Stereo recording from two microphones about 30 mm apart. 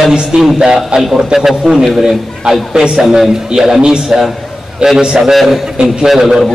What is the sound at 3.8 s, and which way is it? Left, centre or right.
Speech, right.